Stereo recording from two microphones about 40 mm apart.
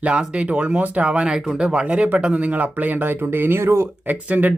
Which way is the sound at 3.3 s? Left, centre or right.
Right.